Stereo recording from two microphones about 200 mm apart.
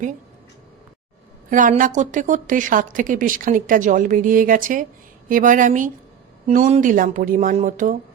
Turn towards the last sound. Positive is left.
turn(degrees=-40)  # may be behind; listen again after turning